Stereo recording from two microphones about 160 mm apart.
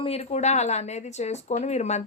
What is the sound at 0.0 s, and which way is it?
Speech, 40° left (ahead or behind).